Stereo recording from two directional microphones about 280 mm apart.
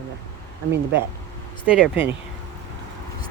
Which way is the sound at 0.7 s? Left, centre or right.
Right.